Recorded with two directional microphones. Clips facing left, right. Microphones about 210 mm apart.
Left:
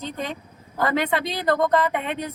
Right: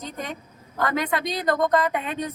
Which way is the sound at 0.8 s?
30° left (ahead or behind).